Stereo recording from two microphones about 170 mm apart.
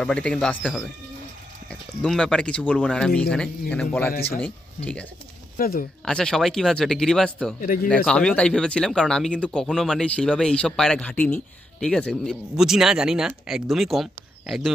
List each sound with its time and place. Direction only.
0.0 s speech: 5° left (ahead or behind)
5.6 s speech: 55° left (ahead or behind)
6.0 s speech: 5° left (ahead or behind)
7.6 s speech: 55° left (ahead or behind)
7.9 s speech: 5° left (ahead or behind)